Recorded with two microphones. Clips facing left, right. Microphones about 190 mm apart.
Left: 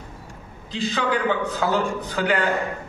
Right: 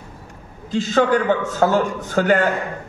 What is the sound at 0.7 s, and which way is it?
A man's voice, 45° right (ahead or behind).